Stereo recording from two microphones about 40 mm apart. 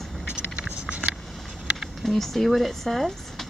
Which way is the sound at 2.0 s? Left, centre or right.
Centre.